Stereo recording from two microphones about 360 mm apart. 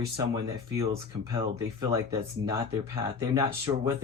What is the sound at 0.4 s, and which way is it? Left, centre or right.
Speech, centre.